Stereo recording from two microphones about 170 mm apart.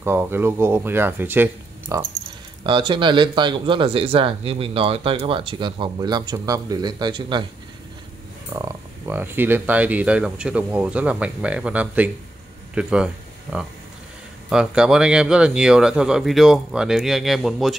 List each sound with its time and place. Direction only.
0.0 s speech: 15° right (ahead or behind)
2.6 s speech: 30° right (ahead or behind)
8.5 s speech: 15° right (ahead or behind)